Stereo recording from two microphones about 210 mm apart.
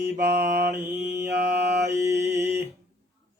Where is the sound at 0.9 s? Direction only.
10° right (ahead or behind).